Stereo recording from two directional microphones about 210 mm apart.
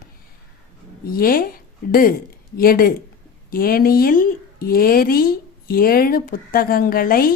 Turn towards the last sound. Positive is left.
turn(degrees=45)  # may be behind; listen again after turning